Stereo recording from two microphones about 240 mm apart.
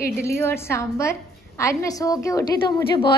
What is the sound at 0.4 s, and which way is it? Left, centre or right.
A woman's voice, centre.